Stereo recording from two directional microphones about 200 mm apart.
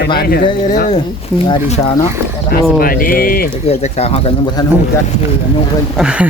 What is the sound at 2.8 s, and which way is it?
Speech, 45° left (ahead or behind).